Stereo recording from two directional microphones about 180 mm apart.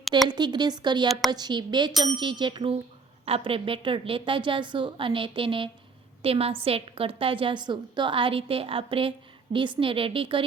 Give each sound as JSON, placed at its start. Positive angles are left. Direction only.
{"t": 0.3, "sound": "a woman's voice", "side_deg": -25}
{"t": 1.9, "sound": "ding", "side_deg": 0}
{"t": 2.1, "sound": "a woman's voice", "side_deg": -25}